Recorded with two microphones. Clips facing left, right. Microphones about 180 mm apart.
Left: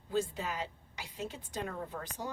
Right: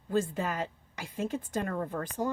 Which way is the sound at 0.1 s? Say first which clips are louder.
Right 4 dB; 50° right (ahead or behind).